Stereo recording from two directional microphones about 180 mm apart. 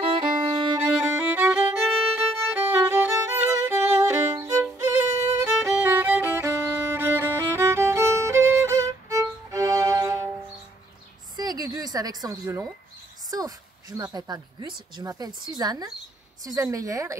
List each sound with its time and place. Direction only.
0.0 s violin: 30° right (ahead or behind)
0.9 s violin: 10° right (ahead or behind)
11.3 s a sound: 20° right (ahead or behind)
13.3 s a woman's voice: 20° right (ahead or behind)